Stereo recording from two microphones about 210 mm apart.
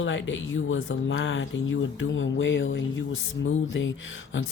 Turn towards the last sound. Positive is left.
turn(degrees=65)  # may be behind; listen again after turning